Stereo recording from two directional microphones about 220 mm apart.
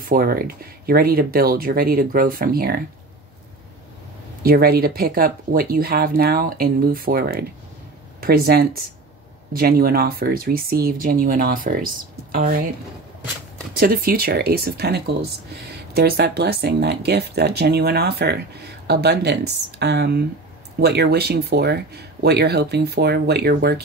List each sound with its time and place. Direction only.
0.0 s speech: 40° right (ahead or behind)
4.4 s speech: 45° right (ahead or behind)
13.7 s speech: 45° right (ahead or behind)